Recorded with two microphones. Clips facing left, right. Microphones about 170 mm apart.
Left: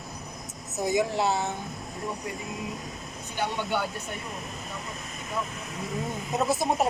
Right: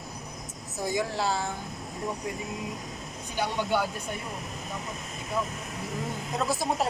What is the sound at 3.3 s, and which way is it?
Speech, 10° right (ahead or behind).